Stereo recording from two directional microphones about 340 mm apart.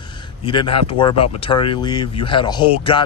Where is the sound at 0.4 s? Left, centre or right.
Centre.